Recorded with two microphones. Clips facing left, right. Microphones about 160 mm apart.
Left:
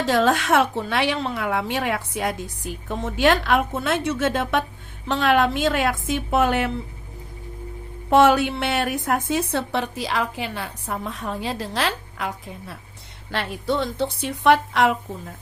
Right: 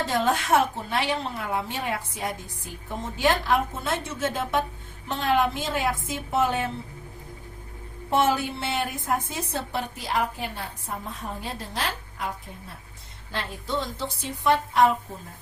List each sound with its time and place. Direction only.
0.0 s a woman's voice: 90° left
8.1 s a woman's voice: 80° left
13.3 s a woman's voice: 75° left (ahead or behind)